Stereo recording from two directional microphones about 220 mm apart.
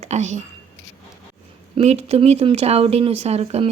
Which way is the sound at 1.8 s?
30° right (ahead or behind).